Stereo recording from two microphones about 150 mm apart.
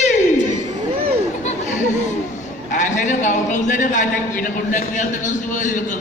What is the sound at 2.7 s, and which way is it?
A man's voice, 55° left (ahead or behind).